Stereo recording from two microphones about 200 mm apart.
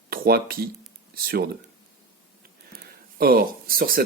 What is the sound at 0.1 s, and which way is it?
Speech, 50° right (ahead or behind).